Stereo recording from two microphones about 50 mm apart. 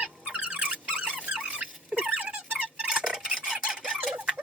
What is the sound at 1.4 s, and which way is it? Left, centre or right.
Rodents, right.